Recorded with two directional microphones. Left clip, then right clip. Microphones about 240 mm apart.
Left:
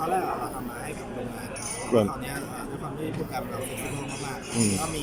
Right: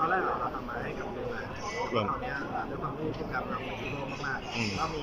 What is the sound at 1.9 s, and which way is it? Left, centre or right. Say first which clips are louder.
Speech: left 9 dB; left.